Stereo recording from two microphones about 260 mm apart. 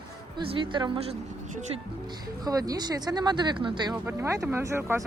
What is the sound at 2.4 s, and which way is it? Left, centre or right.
Speech, centre.